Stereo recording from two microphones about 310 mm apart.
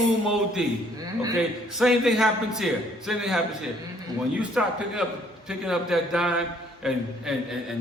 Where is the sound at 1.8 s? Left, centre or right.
Centre.